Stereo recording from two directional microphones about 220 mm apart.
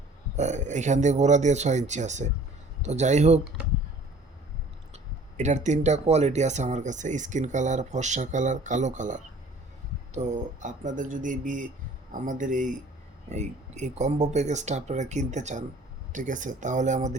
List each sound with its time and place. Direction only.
0.3 s speech: 30° right (ahead or behind)
5.4 s speech: 30° right (ahead or behind)